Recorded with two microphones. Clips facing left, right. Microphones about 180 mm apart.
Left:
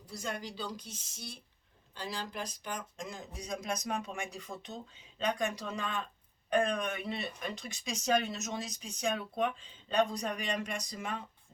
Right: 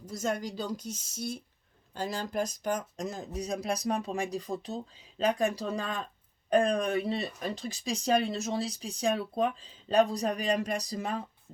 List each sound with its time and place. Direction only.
0.0 s speech: 45° right (ahead or behind)